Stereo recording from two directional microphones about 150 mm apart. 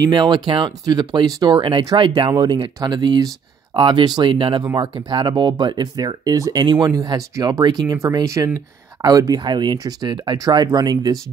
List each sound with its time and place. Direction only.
0.0 s speech: 30° right (ahead or behind)